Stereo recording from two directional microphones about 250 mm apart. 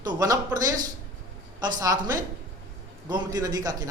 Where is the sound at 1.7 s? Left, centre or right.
Centre.